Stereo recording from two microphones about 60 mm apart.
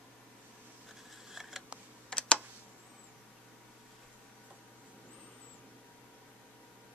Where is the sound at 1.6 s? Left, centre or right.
Centre.